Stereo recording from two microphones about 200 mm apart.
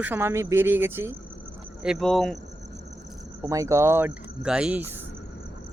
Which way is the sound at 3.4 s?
15° right (ahead or behind).